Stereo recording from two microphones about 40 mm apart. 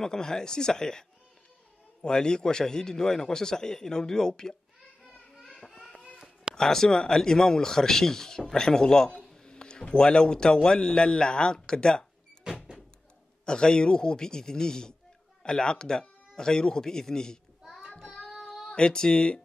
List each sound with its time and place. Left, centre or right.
0.0 s a man's voice: centre
5.6 s a sound: centre
6.5 s a man's voice: centre
13.5 s a man's voice: left
17.7 s child singing: centre
18.7 s speech: left